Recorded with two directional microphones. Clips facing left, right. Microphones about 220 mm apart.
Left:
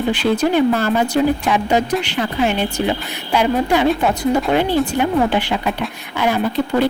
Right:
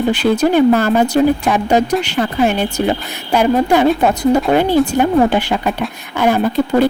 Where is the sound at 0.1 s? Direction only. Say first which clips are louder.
Right 2 dB; 45° right (ahead or behind).